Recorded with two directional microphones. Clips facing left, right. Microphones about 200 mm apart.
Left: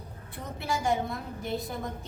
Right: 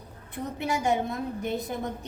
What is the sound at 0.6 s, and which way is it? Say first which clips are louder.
A woman's voice: right 2 dB; 20° right (ahead or behind).